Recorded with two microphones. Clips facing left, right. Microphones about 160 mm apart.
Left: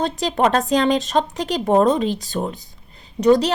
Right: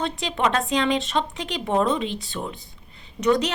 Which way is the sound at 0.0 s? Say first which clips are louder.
Left 5 dB; 40° left (ahead or behind).